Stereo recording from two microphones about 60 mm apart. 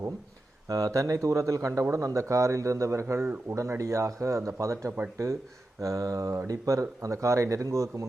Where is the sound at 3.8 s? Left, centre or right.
Right.